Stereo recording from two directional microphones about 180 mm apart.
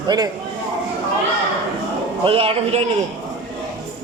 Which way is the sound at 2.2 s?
30° right (ahead or behind).